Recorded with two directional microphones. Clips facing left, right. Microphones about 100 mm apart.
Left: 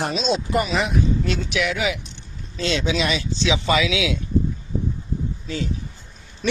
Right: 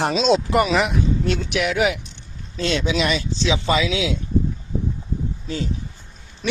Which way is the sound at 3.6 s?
30° right (ahead or behind).